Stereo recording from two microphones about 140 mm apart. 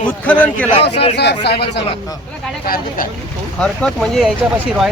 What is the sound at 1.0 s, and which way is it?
Speech, 45° left (ahead or behind).